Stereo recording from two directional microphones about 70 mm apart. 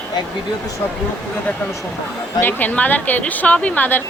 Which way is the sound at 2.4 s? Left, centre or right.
Left.